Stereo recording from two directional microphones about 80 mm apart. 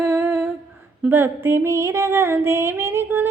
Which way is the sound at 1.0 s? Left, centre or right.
Right.